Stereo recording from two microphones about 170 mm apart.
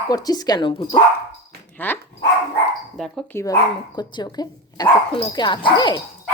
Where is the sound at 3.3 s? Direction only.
20° left (ahead or behind).